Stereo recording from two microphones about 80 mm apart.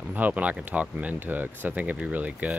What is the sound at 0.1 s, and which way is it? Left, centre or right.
Speech, centre.